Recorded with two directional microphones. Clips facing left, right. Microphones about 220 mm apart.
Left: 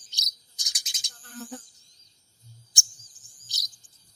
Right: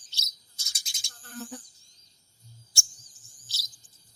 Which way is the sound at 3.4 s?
15° left (ahead or behind).